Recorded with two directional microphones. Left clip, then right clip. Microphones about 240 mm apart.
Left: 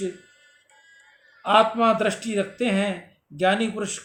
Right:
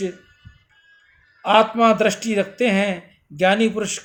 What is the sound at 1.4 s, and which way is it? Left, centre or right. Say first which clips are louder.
Speech: right 3 dB; right.